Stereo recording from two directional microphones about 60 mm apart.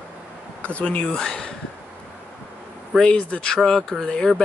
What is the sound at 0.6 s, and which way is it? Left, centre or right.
Speech, left.